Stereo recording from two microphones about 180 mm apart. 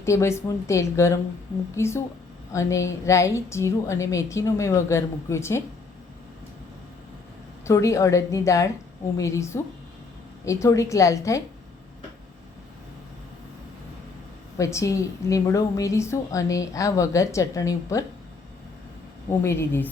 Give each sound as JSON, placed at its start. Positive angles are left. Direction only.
{"t": 0.0, "sound": "a woman's voice", "side_deg": 15}
{"t": 7.6, "sound": "a woman's voice", "side_deg": 15}
{"t": 14.6, "sound": "a woman's voice", "side_deg": 15}
{"t": 19.3, "sound": "a woman's voice", "side_deg": 15}